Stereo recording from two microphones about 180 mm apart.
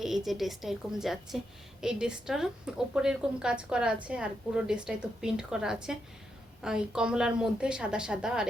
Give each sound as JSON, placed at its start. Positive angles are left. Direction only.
{"t": 0.3, "sound": "a woman's voice", "side_deg": 0}